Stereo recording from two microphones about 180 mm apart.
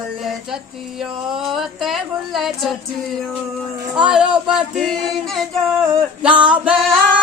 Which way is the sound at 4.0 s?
5° right (ahead or behind).